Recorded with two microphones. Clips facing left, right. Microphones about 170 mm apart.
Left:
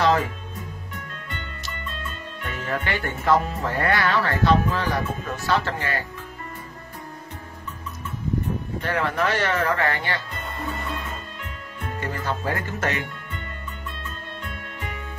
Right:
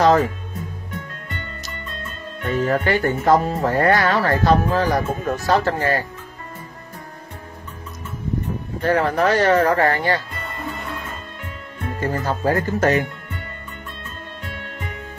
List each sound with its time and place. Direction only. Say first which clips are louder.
0.0 s music: right 5 dB; 40° right (ahead or behind)
2.0 s speech: right 11 dB; 40° right (ahead or behind)
8.8 s speech: right 7 dB; 40° right (ahead or behind)
12.0 s speech: right 6 dB; 40° right (ahead or behind)